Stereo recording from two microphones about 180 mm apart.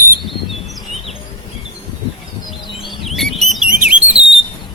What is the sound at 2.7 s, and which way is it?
Bird, centre (ahead or behind).